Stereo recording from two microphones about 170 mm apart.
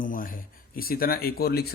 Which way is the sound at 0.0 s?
55° left (ahead or behind).